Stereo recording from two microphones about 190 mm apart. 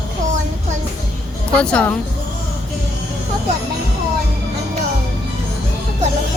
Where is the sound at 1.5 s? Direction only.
5° left (ahead or behind).